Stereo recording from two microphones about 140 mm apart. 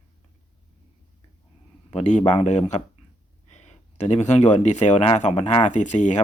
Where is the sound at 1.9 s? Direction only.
55° left (ahead or behind).